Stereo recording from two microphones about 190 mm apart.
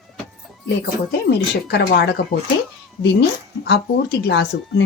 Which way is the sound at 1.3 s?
60° left (ahead or behind).